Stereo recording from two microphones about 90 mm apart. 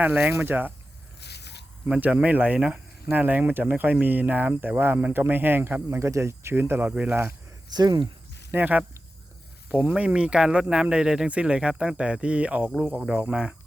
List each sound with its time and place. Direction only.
0.0 s speech: 20° right (ahead or behind)
2.0 s speech: 15° right (ahead or behind)
7.8 s speech: 55° right (ahead or behind)
8.5 s speech: 20° right (ahead or behind)